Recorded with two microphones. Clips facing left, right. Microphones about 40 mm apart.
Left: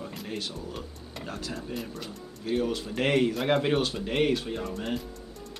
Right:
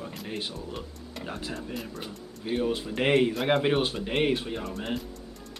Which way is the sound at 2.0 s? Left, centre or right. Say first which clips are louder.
Even; centre.